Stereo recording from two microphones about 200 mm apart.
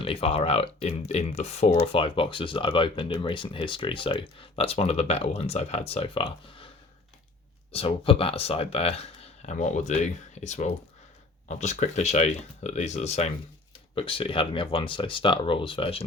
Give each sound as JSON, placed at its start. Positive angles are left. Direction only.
{"t": 0.0, "sound": "speech", "side_deg": 25}
{"t": 7.7, "sound": "speech", "side_deg": 30}